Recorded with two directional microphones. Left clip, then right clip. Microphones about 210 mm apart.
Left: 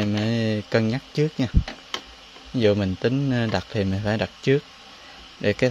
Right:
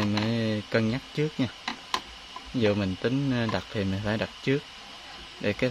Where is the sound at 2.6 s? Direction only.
25° left (ahead or behind).